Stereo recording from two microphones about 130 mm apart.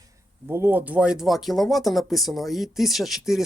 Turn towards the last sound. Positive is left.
turn(degrees=0)  # may be behind; listen again after turning